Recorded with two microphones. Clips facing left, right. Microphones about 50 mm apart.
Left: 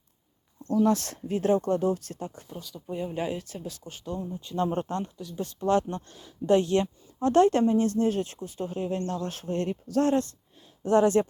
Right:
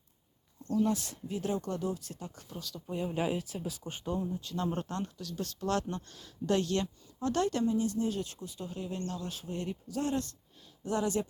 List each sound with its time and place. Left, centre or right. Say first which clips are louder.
0.7 s speech: left 6 dB; left
1.4 s speech: left 10 dB; left
2.5 s speech: left 3 dB; centre
3.8 s speech: right 1 dB; centre
4.5 s speech: left 8 dB; left
10.8 s speech: left 10 dB; left